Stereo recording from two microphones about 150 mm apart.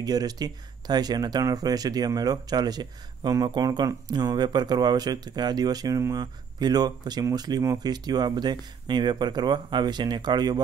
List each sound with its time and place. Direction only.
0.0 s speech: 25° right (ahead or behind)